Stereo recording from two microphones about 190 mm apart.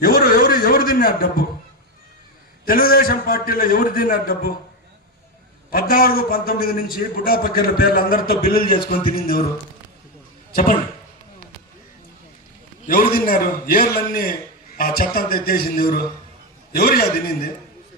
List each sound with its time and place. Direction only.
0.0 s a sound: 50° left (ahead or behind)
2.6 s a man's voice: 50° left (ahead or behind)
5.7 s a man's voice: 50° left (ahead or behind)
10.5 s speech: 50° left (ahead or behind)
13.1 s a man's voice: 50° left (ahead or behind)